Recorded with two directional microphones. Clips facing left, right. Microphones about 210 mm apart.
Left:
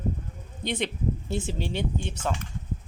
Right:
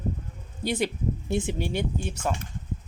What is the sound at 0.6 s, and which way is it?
Speech, 5° right (ahead or behind).